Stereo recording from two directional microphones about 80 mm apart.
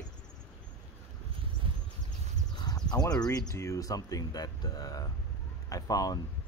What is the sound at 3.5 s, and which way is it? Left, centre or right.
Speech, left.